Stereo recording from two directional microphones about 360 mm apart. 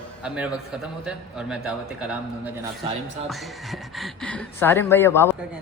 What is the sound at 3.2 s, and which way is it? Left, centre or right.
Speech, centre.